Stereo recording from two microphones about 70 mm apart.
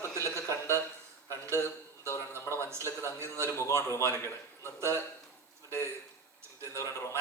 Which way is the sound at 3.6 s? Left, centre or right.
Left.